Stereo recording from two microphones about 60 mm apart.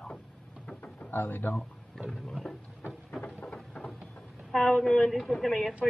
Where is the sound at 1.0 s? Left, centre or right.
Left.